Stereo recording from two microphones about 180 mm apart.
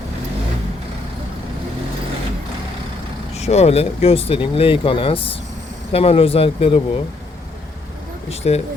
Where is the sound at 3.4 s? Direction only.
35° left (ahead or behind).